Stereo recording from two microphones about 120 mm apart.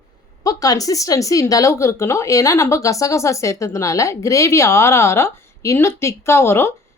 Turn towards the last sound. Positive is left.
turn(degrees=20)  # may be behind; listen again after turning